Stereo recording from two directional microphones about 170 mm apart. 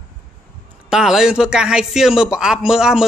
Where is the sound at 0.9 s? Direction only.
5° right (ahead or behind).